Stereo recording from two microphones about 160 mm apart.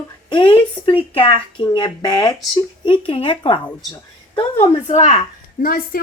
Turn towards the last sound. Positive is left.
turn(degrees=65)  # may be behind; listen again after turning